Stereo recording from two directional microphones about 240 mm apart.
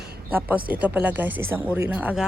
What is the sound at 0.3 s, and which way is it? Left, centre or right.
Speech, centre.